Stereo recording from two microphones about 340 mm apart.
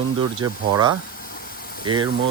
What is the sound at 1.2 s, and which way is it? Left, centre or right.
Vehicle, left.